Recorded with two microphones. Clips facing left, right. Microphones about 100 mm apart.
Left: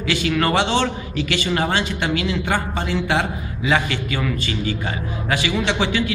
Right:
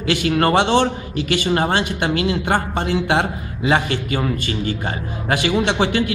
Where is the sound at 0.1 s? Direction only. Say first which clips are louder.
Right 3 dB; 40° right (ahead or behind).